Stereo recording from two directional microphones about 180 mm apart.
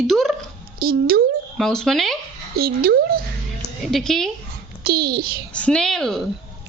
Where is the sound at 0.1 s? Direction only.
Centre (ahead or behind).